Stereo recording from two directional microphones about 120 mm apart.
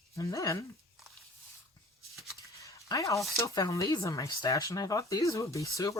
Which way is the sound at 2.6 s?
25° left (ahead or behind).